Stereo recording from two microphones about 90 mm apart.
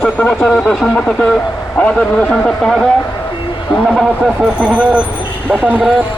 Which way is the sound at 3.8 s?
5° right (ahead or behind).